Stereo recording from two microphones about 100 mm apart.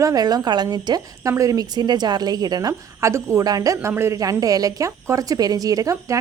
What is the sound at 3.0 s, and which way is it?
A woman's voice, 30° right (ahead or behind).